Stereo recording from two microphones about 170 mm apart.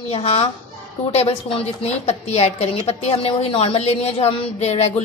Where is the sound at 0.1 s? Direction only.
35° left (ahead or behind).